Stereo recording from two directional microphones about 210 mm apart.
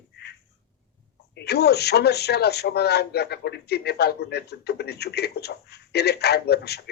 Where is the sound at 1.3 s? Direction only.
50° left (ahead or behind).